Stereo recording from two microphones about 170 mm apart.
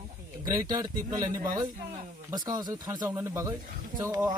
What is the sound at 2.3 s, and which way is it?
Speech, 25° right (ahead or behind).